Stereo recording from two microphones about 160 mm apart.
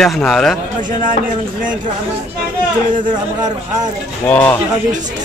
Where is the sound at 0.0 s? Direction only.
Centre (ahead or behind).